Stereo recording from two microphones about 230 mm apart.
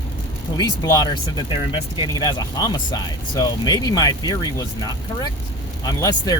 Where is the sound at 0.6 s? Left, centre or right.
Centre.